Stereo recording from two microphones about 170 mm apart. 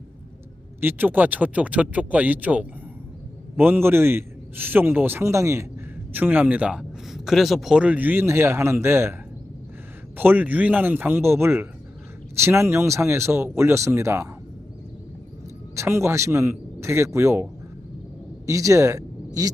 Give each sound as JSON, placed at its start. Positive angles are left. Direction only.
{"t": 0.8, "sound": "speech", "side_deg": -10}
{"t": 10.2, "sound": "speech", "side_deg": -10}
{"t": 15.7, "sound": "speech", "side_deg": -15}